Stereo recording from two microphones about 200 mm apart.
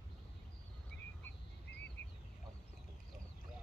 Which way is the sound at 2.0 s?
60° left (ahead or behind).